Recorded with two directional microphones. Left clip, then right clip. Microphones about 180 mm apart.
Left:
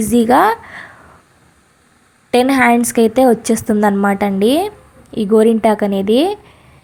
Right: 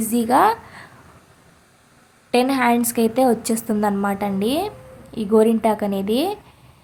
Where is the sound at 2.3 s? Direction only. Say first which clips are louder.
Left 6 dB; 30° left (ahead or behind).